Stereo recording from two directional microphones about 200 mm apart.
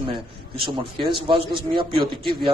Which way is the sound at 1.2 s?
25° right (ahead or behind).